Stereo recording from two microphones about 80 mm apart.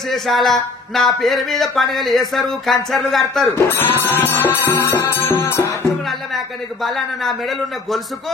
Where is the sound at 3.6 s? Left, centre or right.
Left.